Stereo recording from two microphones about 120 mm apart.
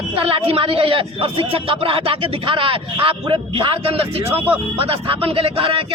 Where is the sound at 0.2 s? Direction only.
50° right (ahead or behind).